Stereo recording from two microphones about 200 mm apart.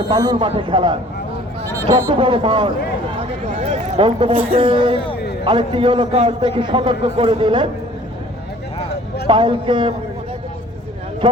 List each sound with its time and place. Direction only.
0.1 s a man's voice: 20° right (ahead or behind)
5.1 s a sound: 55° left (ahead or behind)
5.5 s a man's voice: 25° right (ahead or behind)
9.2 s a man's voice: 25° right (ahead or behind)